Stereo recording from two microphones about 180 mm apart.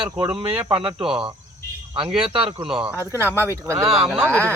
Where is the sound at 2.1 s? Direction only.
30° right (ahead or behind).